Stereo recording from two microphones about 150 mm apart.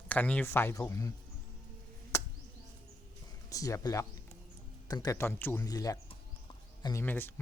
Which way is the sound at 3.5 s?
20° left (ahead or behind).